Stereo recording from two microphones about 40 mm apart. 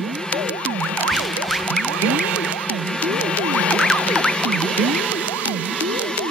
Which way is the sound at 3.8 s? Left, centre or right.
Left.